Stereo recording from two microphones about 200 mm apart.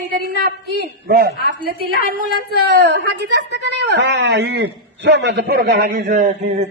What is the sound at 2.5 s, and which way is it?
A woman's voice, 55° right (ahead or behind).